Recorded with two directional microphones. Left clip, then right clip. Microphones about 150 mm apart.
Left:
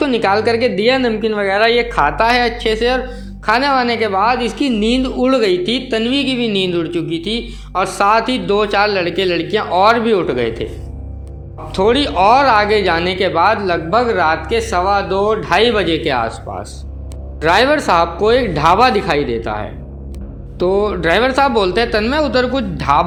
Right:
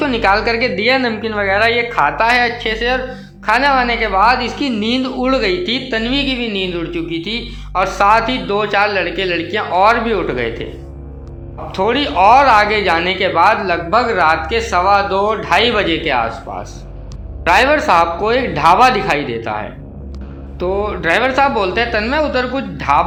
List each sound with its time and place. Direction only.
0.0 s speech: 30° left (ahead or behind)
11.7 s speech: 40° left (ahead or behind)